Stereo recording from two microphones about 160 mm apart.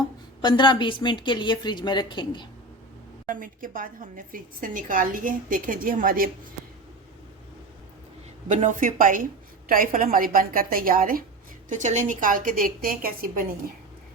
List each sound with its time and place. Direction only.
0.4 s a woman's voice: 30° left (ahead or behind)
3.2 s a woman's voice: 55° right (ahead or behind)
8.4 s a woman's voice: 50° right (ahead or behind)
11.7 s a woman's voice: 50° right (ahead or behind)